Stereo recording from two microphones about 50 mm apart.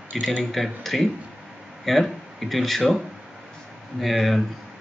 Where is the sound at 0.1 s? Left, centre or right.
Centre.